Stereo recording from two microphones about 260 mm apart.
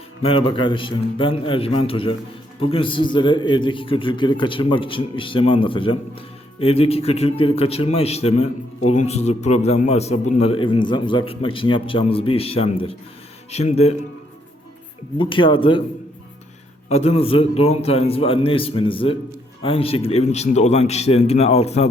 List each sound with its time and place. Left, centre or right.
0.2 s a man's voice: left
15.2 s a man's voice: centre
16.9 s a man's voice: left